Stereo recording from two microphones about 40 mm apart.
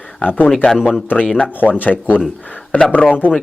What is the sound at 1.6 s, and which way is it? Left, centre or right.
Speech, left.